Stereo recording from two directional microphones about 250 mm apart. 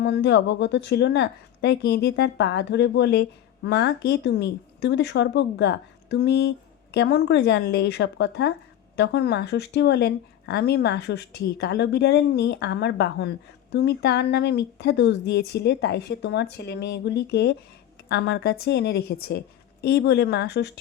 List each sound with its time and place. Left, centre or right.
0.0 s a woman's voice: left